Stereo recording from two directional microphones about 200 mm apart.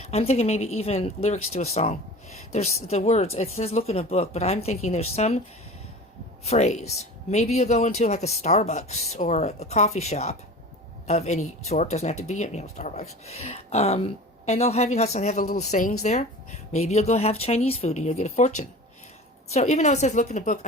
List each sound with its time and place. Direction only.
0.0 s speech: 30° left (ahead or behind)
6.4 s speech: 35° left (ahead or behind)